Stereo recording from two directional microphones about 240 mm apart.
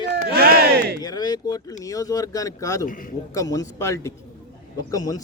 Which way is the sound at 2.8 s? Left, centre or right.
Left.